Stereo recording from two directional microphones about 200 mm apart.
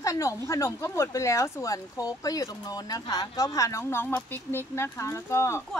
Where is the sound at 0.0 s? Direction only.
15° left (ahead or behind).